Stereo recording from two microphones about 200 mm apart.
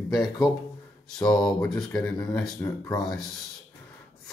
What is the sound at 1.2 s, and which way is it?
Speech, 5° left (ahead or behind).